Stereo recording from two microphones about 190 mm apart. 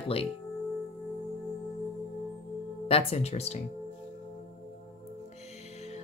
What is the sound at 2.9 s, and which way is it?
Speech, 30° left (ahead or behind).